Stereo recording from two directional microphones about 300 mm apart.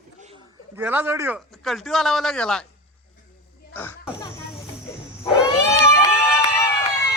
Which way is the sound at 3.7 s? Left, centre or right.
Centre.